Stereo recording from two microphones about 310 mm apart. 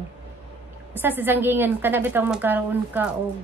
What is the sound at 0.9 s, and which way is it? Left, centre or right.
A woman's voice, centre.